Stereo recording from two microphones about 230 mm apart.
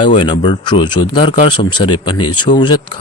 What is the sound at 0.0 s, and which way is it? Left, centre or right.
Speech, left.